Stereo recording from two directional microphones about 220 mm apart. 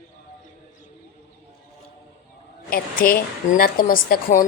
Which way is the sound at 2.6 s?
40° left (ahead or behind).